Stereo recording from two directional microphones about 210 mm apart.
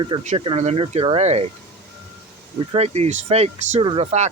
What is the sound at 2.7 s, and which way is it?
Speech, 30° right (ahead or behind).